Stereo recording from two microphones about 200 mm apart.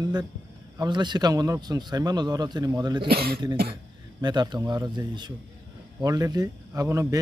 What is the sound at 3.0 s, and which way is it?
Speech, 50° right (ahead or behind).